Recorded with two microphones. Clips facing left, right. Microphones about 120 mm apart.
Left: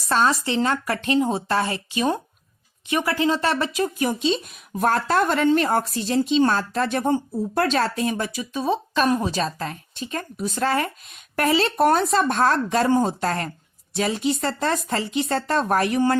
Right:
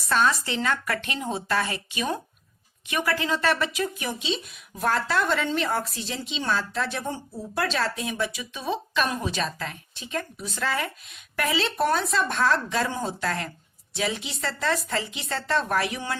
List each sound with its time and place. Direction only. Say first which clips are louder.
0.1 s speech: left 3 dB; 35° left (ahead or behind)